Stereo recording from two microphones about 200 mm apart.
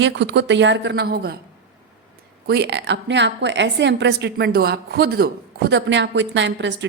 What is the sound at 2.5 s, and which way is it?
A woman's voice, 55° right (ahead or behind).